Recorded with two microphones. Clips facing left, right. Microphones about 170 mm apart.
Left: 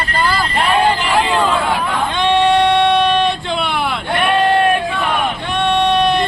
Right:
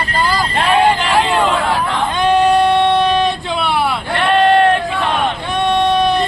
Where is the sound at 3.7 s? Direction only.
35° right (ahead or behind).